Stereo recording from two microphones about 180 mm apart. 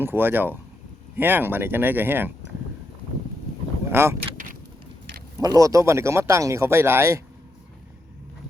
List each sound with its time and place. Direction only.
0.0 s speech: 10° right (ahead or behind)
3.8 s speech: 15° right (ahead or behind)
5.4 s speech: 20° right (ahead or behind)